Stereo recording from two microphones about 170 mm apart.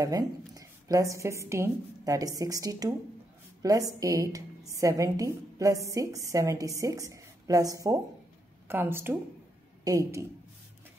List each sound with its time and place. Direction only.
0.0 s a woman's voice: 20° right (ahead or behind)